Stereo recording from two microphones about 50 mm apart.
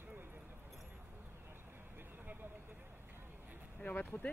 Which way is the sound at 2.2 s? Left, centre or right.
Right.